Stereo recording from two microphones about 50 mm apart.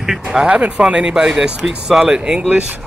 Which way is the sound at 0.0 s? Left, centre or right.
Centre.